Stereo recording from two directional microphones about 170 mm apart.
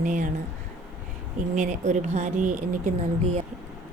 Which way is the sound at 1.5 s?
45° right (ahead or behind).